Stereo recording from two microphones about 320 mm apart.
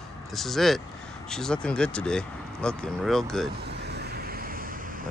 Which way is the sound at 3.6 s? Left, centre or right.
Right.